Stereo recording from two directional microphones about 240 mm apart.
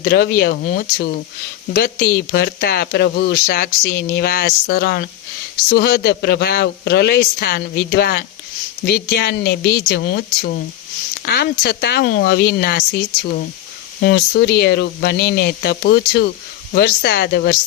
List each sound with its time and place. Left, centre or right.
0.0 s speech: left
14.0 s speech: left